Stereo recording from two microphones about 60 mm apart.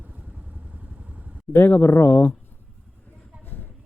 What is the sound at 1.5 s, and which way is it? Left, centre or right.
Speech, left.